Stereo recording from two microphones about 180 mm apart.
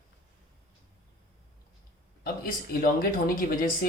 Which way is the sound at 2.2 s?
55° left (ahead or behind).